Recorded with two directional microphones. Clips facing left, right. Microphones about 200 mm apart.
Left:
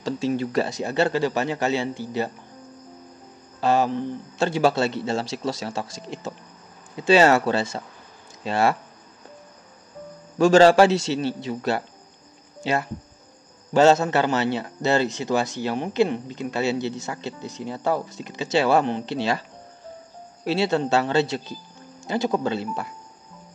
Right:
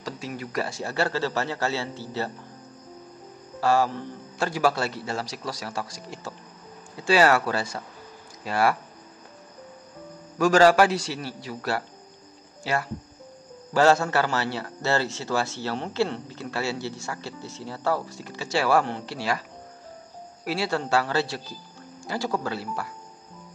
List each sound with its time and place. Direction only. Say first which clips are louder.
0.0 s a man's voice: left 10 dB; 25° left (ahead or behind)
3.6 s a man's voice: left 2 dB; 20° left (ahead or behind)
10.3 s a man's voice: left 4 dB; 25° left (ahead or behind)
20.4 s a man's voice: left 5 dB; 20° left (ahead or behind)